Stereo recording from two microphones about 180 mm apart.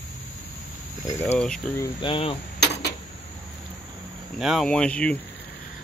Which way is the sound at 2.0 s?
30° left (ahead or behind).